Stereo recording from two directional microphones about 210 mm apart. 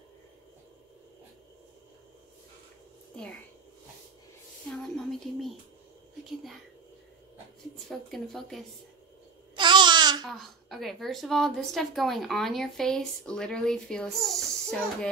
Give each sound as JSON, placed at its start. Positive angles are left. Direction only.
{"t": 4.6, "sound": "a sound", "side_deg": 0}
{"t": 7.7, "sound": "a woman's voice", "side_deg": 0}
{"t": 9.6, "sound": "babbling", "side_deg": -20}
{"t": 10.2, "sound": "a woman's voice", "side_deg": 0}